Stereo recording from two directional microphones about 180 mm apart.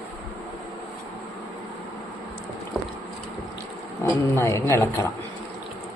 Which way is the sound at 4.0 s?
15° left (ahead or behind).